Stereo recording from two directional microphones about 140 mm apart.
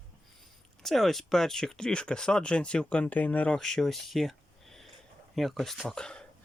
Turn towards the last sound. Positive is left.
turn(degrees=5)  # may be behind; listen again after turning